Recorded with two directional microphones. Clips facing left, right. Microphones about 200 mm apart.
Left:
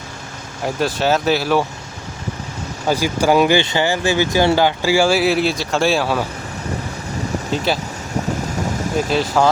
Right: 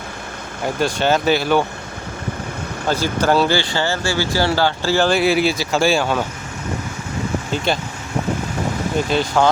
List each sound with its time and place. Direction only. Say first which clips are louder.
0.6 s speech: even; centre (ahead or behind)
2.8 s speech: left 2 dB; 10° left (ahead or behind)
7.5 s speech: left 1 dB; centre (ahead or behind)
9.0 s speech: left 1 dB; centre (ahead or behind)